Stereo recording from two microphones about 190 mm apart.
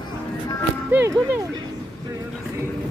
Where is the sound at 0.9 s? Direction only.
10° right (ahead or behind).